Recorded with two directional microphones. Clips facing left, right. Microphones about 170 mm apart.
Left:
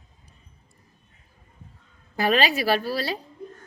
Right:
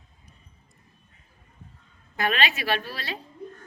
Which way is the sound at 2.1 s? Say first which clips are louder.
Left 5 dB; 35° left (ahead or behind).